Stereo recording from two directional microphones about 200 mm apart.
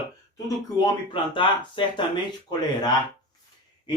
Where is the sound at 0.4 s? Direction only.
25° left (ahead or behind).